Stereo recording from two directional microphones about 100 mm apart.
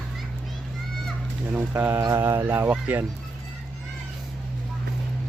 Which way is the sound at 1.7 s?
20° right (ahead or behind).